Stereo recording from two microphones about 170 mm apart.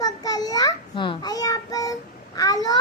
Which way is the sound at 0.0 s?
20° left (ahead or behind).